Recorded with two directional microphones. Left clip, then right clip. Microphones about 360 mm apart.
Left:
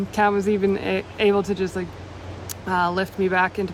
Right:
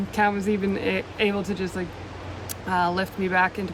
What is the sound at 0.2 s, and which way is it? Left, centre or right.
Speech, centre.